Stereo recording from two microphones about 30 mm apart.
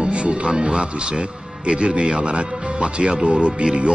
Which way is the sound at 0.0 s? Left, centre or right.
Right.